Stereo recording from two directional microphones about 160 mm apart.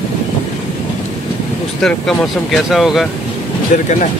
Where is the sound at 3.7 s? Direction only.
55° left (ahead or behind).